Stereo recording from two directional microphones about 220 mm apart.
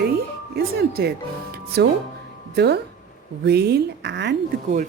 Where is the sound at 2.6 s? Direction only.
50° right (ahead or behind).